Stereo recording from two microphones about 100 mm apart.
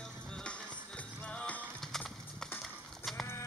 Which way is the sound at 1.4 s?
10° left (ahead or behind).